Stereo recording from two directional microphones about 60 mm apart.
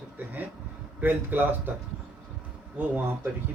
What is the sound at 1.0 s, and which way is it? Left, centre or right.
Speech, right.